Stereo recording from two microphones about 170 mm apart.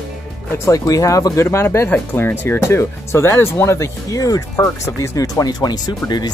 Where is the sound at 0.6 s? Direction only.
20° left (ahead or behind).